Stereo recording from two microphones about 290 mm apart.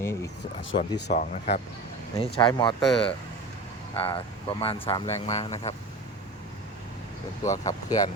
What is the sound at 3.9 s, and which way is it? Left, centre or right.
Speech, centre.